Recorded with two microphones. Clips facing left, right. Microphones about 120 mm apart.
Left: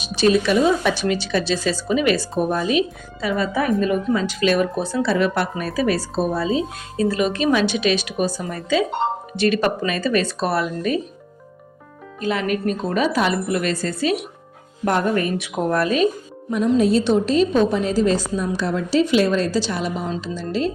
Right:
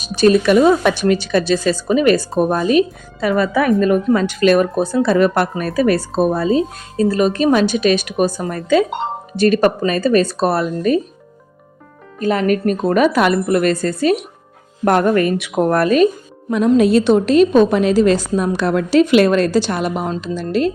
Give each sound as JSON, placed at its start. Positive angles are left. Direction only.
{"t": 0.0, "sound": "speech", "side_deg": -45}
{"t": 3.8, "sound": "speech", "side_deg": -55}
{"t": 12.2, "sound": "speech", "side_deg": -45}
{"t": 14.8, "sound": "a woman's voice", "side_deg": -60}
{"t": 16.6, "sound": "a woman's voice", "side_deg": -70}